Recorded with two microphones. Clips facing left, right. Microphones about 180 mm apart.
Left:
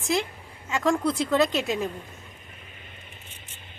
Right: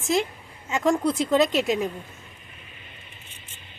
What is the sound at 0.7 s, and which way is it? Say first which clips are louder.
A woman's voice: right 2 dB; 20° right (ahead or behind).